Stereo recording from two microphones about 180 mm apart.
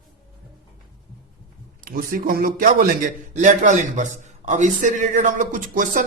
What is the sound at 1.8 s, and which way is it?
A man's voice, 50° right (ahead or behind).